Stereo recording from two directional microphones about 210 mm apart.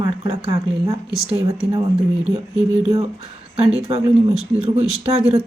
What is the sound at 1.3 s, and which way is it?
Speech, 25° right (ahead or behind).